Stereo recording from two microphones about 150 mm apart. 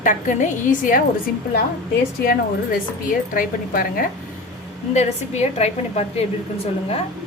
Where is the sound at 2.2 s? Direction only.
90° left.